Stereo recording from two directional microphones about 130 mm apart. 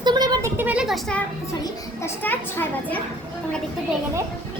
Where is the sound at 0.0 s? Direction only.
35° right (ahead or behind).